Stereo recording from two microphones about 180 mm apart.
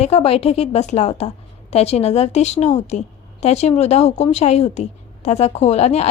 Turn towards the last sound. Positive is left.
turn(degrees=35)  # may be behind; listen again after turning